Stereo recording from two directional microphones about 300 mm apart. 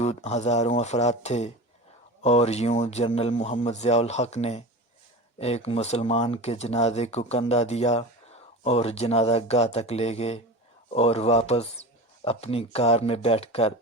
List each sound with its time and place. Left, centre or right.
0.0 s speech: left